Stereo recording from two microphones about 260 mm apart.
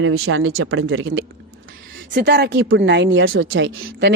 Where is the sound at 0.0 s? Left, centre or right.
Right.